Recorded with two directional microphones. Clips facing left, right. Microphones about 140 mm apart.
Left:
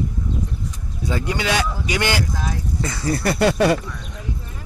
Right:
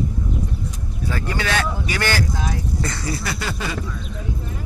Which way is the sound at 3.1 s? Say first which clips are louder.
Left 8 dB; 55° left (ahead or behind).